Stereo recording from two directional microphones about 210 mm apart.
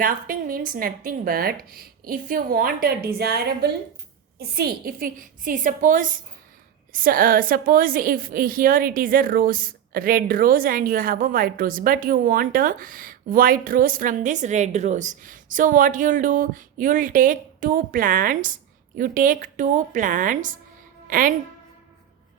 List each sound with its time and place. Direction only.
0.0 s a woman's voice: 40° right (ahead or behind)